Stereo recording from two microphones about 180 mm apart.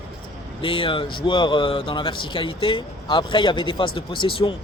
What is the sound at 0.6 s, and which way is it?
Speech, 30° left (ahead or behind).